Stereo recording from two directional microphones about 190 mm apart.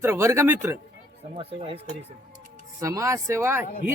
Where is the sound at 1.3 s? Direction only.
30° right (ahead or behind).